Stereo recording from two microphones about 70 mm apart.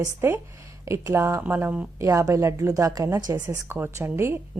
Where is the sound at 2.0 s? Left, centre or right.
Right.